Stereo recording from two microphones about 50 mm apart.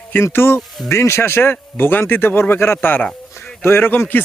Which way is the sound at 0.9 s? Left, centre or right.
Left.